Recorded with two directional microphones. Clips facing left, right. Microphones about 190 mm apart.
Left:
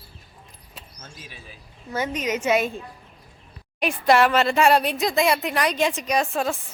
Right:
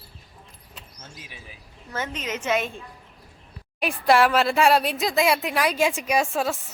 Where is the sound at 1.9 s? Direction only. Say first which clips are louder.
Left 5 dB; 10° left (ahead or behind).